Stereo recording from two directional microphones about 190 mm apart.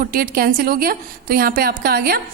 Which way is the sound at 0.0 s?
50° right (ahead or behind).